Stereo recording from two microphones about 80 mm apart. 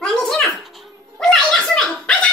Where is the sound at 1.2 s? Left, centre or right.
Centre.